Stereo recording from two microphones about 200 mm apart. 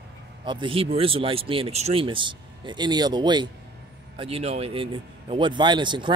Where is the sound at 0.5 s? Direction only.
25° right (ahead or behind).